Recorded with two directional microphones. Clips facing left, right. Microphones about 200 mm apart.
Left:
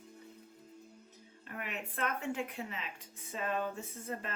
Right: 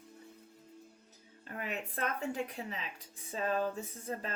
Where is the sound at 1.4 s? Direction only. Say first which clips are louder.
Right 3 dB; 35° right (ahead or behind).